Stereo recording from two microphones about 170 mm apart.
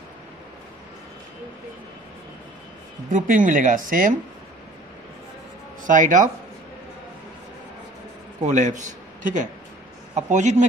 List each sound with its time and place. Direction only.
3.1 s speech: 50° right (ahead or behind)
5.9 s speech: 50° right (ahead or behind)
8.4 s a man's voice: 45° right (ahead or behind)